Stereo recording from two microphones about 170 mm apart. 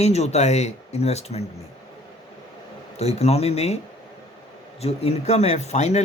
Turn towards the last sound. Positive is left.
turn(degrees=40)  # may be behind; listen again after turning